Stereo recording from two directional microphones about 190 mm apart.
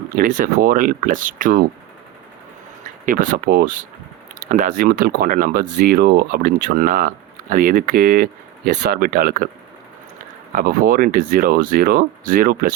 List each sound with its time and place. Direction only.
0.2 s speech: 45° right (ahead or behind)
3.1 s speech: 45° right (ahead or behind)
10.5 s speech: 50° right (ahead or behind)